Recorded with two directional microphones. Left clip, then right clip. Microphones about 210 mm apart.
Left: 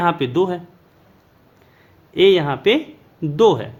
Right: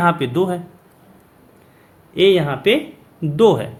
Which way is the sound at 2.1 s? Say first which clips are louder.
Even; 35° left (ahead or behind).